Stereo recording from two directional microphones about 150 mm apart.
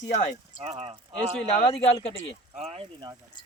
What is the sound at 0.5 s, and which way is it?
Speech, 40° right (ahead or behind).